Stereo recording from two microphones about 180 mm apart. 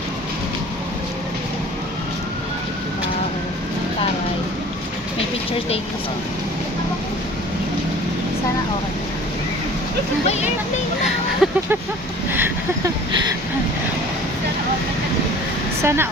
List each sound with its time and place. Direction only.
10.2 s speech: 40° left (ahead or behind)
11.4 s vehicle: centre (ahead or behind)
12.3 s a sound: 15° right (ahead or behind)
15.8 s speech: 15° right (ahead or behind)